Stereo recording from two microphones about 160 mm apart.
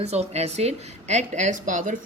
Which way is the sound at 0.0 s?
40° right (ahead or behind).